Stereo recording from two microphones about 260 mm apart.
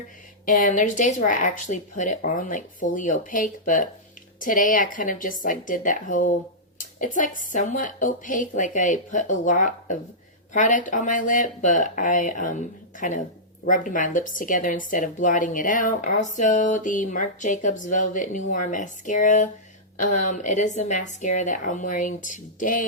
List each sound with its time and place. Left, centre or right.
0.4 s a woman's voice: left
6.7 s a sound: left
7.5 s a woman's voice: left